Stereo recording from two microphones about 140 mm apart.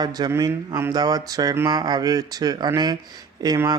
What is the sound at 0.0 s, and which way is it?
Speech, 25° right (ahead or behind).